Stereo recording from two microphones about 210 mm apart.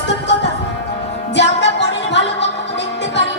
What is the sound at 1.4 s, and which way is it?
Music, 55° left (ahead or behind).